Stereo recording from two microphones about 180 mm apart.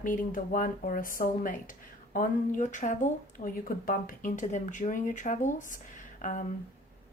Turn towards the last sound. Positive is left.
turn(degrees=45)  # may be behind; listen again after turning